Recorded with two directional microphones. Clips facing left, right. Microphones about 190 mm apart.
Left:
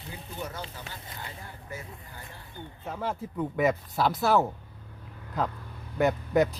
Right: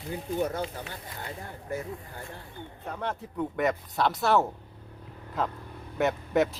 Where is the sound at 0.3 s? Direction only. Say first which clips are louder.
Right 9 dB; 55° right (ahead or behind).